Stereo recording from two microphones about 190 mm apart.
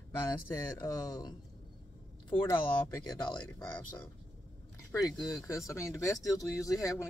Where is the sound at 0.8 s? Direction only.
20° left (ahead or behind).